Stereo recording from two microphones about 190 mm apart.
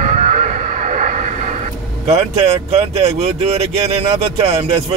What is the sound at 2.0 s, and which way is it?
Speech, 35° right (ahead or behind).